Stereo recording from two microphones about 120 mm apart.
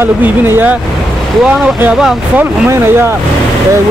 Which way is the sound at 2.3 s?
15° right (ahead or behind).